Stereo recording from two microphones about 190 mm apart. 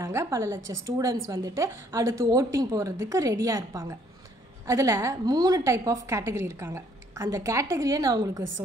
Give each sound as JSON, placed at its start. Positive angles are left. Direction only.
{"t": 0.0, "sound": "a woman's voice", "side_deg": -15}